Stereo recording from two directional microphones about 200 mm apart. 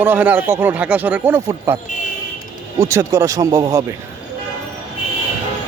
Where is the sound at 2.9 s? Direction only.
15° right (ahead or behind).